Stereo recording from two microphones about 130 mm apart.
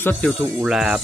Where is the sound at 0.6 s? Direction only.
5° right (ahead or behind).